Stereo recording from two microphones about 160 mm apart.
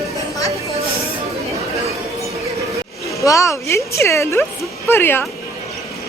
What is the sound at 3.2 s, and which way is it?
Speech, 20° left (ahead or behind).